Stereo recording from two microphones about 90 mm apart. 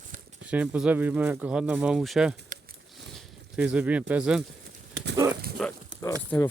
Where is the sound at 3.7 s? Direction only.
15° right (ahead or behind).